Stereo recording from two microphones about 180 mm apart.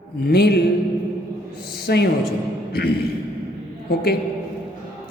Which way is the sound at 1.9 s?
65° left (ahead or behind).